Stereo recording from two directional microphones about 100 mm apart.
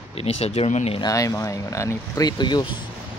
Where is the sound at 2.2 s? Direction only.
45° left (ahead or behind).